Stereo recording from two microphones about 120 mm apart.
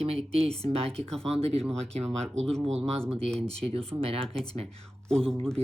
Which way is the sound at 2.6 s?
60° right (ahead or behind).